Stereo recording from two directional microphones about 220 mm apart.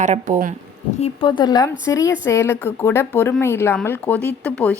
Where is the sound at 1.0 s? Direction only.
20° left (ahead or behind).